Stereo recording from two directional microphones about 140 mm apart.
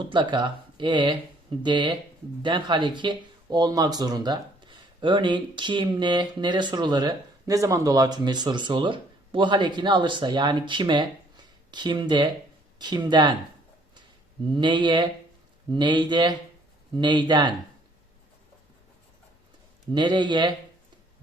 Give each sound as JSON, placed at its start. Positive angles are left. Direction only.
{"t": 0.0, "sound": "speech", "side_deg": -35}
{"t": 14.5, "sound": "speech", "side_deg": -35}
{"t": 19.9, "sound": "speech", "side_deg": -35}